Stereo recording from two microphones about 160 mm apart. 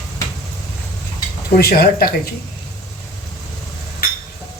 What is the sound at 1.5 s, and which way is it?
Speech, 75° left (ahead or behind).